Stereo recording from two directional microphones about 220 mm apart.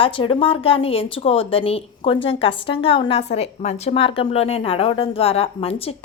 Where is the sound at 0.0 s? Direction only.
25° left (ahead or behind).